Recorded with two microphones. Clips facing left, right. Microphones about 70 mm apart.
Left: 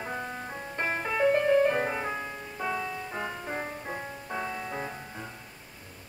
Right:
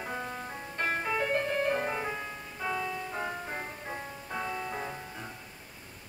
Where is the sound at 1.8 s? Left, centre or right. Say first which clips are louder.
Left 2 dB; centre.